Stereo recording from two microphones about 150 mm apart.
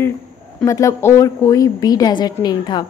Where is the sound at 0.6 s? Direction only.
20° left (ahead or behind).